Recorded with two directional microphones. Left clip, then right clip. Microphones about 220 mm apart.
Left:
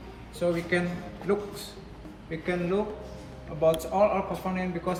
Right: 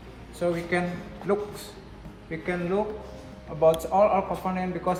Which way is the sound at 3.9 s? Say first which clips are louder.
Right 3 dB; 20° right (ahead or behind).